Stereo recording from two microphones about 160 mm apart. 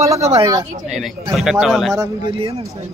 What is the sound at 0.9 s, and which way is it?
Speech, centre (ahead or behind).